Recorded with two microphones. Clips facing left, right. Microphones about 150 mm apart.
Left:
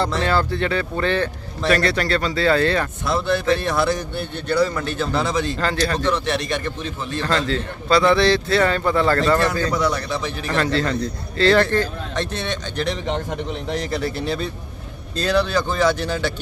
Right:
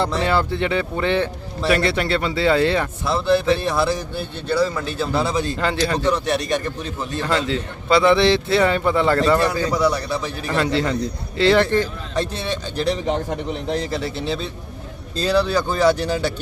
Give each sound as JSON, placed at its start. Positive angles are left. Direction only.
{"t": 0.1, "sound": "speech", "side_deg": -15}
{"t": 3.1, "sound": "a man's voice", "side_deg": -5}
{"t": 6.1, "sound": "speech", "side_deg": -40}
{"t": 7.2, "sound": "a man's voice", "side_deg": -15}
{"t": 12.1, "sound": "a man's voice", "side_deg": -5}
{"t": 12.7, "sound": "speech", "side_deg": -35}
{"t": 13.9, "sound": "speech", "side_deg": 0}
{"t": 15.2, "sound": "a man's voice", "side_deg": -10}